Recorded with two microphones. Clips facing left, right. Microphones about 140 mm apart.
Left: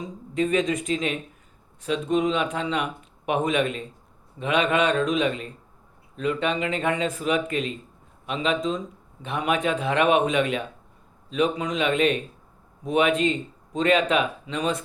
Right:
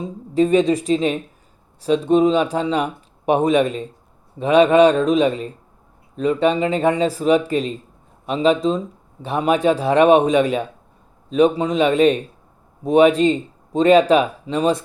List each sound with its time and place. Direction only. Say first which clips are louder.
0.3 s speech: right 8 dB; 35° right (ahead or behind)